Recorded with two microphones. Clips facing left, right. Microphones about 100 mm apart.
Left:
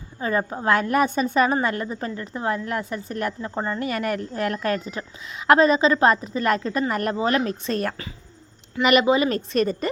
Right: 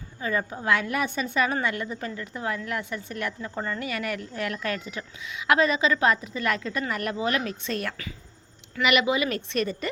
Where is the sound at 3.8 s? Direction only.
40° left (ahead or behind).